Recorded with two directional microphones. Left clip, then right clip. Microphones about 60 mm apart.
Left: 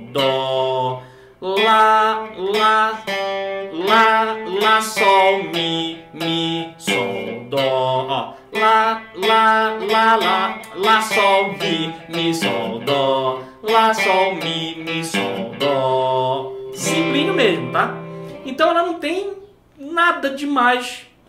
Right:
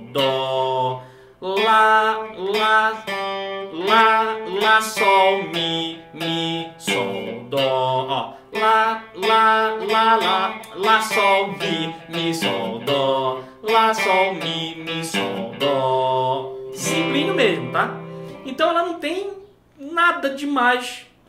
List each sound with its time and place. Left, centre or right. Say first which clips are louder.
0.3 s mantra: left 2 dB; centre
1.7 s music: left 1 dB; centre
3.1 s music: left 3 dB; left
3.4 s music: left 2 dB; centre
5.3 s music: left 2 dB; centre
17.1 s speech: left 2 dB; centre
18.5 s music: left 3 dB; centre